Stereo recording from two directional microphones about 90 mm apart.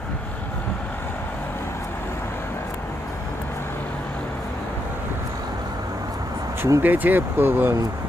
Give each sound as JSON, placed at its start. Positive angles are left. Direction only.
{"t": 6.6, "sound": "speech", "side_deg": -35}
{"t": 6.8, "sound": "speech", "side_deg": -20}